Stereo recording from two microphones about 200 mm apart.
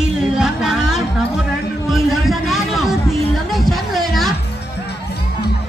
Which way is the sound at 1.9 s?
Centre (ahead or behind).